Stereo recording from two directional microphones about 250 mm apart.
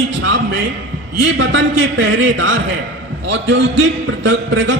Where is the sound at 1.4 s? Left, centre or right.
Right.